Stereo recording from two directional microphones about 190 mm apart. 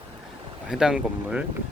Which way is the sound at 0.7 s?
5° right (ahead or behind).